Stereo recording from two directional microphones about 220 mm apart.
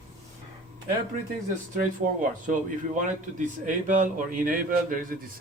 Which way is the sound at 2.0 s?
35° right (ahead or behind).